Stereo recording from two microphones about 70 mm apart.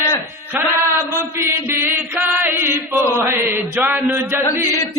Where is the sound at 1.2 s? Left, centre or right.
Right.